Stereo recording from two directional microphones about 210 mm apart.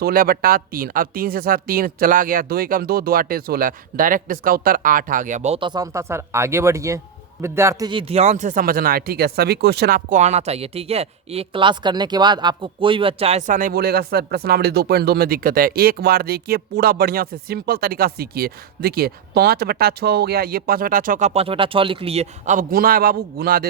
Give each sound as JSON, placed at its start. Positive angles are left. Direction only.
{"t": 0.0, "sound": "speech", "side_deg": -45}